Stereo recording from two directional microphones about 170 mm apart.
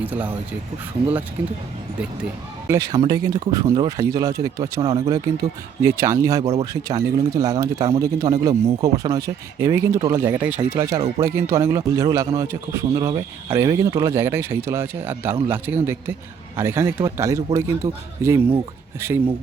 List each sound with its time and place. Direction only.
0.0 s a man's voice: 10° right (ahead or behind)
2.6 s speech: 20° right (ahead or behind)
6.4 s speech: 40° right (ahead or behind)
6.8 s speech: 20° right (ahead or behind)
10.4 s a man's voice: 10° right (ahead or behind)